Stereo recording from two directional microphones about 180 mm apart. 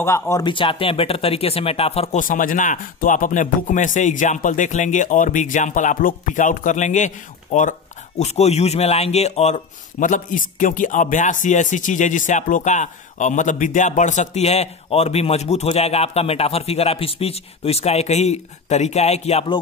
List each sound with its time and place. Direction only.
0.0 s speech: 15° left (ahead or behind); by 2.2 s 35° left (ahead or behind)
2.2 s speech: 50° left (ahead or behind); by 19.6 s 30° left (ahead or behind)